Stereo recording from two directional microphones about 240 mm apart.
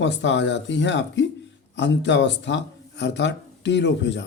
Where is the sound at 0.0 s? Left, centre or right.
Left.